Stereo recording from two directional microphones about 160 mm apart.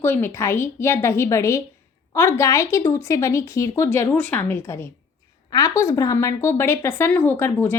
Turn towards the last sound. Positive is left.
turn(degrees=15)  # may be behind; listen again after turning